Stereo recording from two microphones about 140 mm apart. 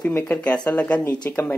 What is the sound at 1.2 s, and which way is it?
Speech, 10° left (ahead or behind).